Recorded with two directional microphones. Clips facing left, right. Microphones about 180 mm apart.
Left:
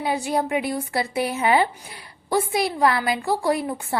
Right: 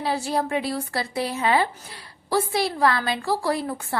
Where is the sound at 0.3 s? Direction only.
20° left (ahead or behind).